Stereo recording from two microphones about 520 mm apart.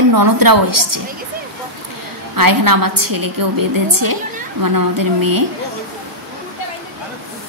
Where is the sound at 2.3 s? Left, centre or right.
Right.